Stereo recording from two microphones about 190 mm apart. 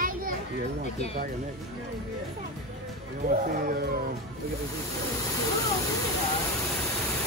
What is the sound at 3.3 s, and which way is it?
Speech, 50° right (ahead or behind).